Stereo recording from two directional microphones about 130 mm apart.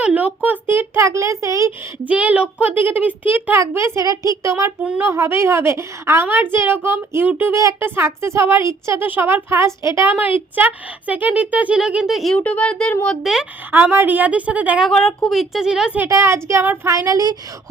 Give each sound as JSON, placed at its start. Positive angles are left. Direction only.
{"t": 0.0, "sound": "a child's voice", "side_deg": -10}
{"t": 2.0, "sound": "a child's voice", "side_deg": -10}
{"t": 13.2, "sound": "a woman's voice", "side_deg": -5}
{"t": 13.7, "sound": "a child's voice", "side_deg": -15}
{"t": 14.8, "sound": "a woman's voice", "side_deg": 5}
{"t": 16.0, "sound": "speech", "side_deg": -20}